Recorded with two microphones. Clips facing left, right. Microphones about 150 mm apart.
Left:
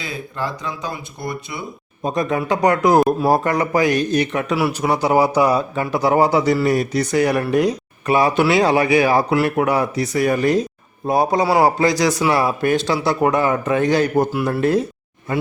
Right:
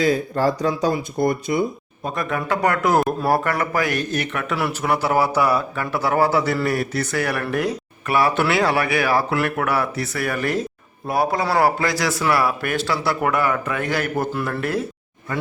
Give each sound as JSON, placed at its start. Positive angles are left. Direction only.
{"t": 0.0, "sound": "speech", "side_deg": -40}
{"t": 2.0, "sound": "a man's voice", "side_deg": 20}